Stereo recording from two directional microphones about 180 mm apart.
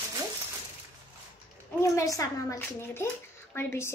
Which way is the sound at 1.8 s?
15° left (ahead or behind).